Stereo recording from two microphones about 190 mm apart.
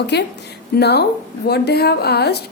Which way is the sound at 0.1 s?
65° left (ahead or behind).